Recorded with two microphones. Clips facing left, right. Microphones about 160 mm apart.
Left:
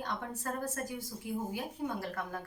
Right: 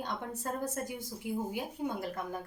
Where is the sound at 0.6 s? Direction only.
20° right (ahead or behind).